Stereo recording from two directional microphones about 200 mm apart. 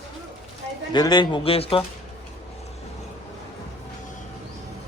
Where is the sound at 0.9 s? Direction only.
20° left (ahead or behind).